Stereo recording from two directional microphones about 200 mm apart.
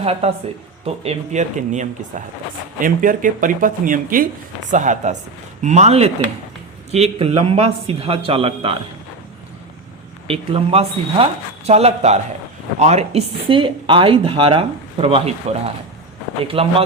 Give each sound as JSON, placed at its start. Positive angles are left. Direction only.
{"t": 0.0, "sound": "speech", "side_deg": -30}
{"t": 10.2, "sound": "speech", "side_deg": -30}